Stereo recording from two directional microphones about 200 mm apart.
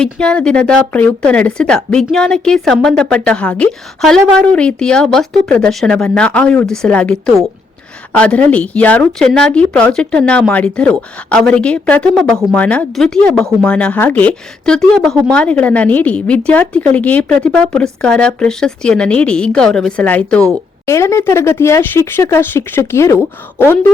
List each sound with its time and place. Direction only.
0.0 s speech: 5° left (ahead or behind)